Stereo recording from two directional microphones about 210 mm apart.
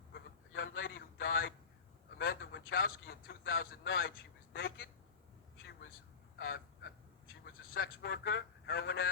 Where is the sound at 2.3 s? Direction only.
60° left (ahead or behind).